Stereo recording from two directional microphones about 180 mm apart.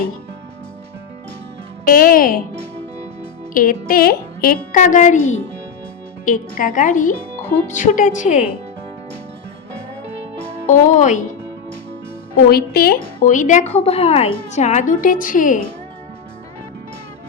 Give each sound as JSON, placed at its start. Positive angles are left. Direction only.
{"t": 1.9, "sound": "a woman's voice", "side_deg": 50}
{"t": 3.5, "sound": "a woman's voice", "side_deg": 50}
{"t": 6.2, "sound": "a woman's voice", "side_deg": 50}
{"t": 10.7, "sound": "a woman's voice", "side_deg": 45}
{"t": 12.5, "sound": "a woman's voice", "side_deg": 60}
{"t": 13.1, "sound": "a woman's voice", "side_deg": 45}